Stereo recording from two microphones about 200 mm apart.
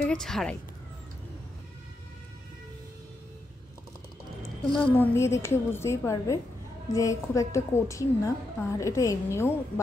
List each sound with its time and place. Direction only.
0.0 s speech: 5° left (ahead or behind)
4.7 s a woman's voice: 10° left (ahead or behind)